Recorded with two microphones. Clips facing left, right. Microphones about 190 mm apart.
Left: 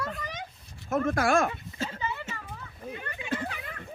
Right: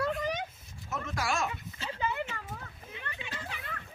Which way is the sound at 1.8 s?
45° left (ahead or behind).